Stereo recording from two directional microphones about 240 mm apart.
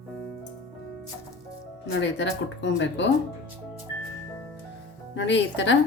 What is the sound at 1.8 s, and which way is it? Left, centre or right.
A woman's voice, left.